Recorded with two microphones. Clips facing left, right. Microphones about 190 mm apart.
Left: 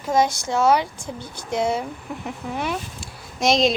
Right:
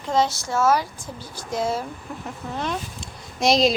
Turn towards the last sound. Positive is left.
turn(degrees=0)  # may be behind; listen again after turning